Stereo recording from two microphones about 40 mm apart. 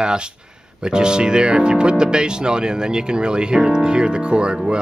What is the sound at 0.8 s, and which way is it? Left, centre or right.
Speech, right.